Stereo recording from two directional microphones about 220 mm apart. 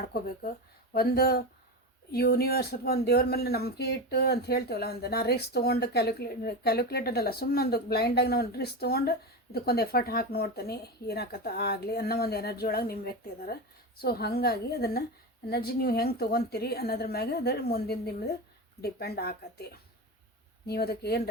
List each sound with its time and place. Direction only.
0.0 s speech: 40° left (ahead or behind)
20.7 s speech: 45° left (ahead or behind)